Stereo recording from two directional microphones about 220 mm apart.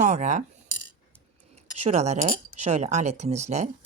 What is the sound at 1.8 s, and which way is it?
Speech, 30° right (ahead or behind).